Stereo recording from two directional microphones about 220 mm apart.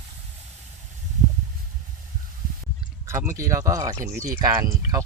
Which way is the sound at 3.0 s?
10° right (ahead or behind).